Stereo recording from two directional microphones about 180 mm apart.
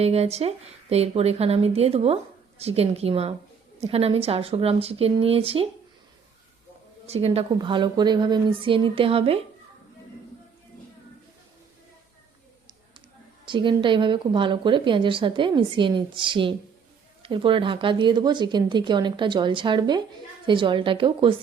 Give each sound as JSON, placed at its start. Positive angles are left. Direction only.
{"t": 0.0, "sound": "speech", "side_deg": -35}
{"t": 7.1, "sound": "a woman's voice", "side_deg": -35}
{"t": 13.4, "sound": "a woman's voice", "side_deg": -25}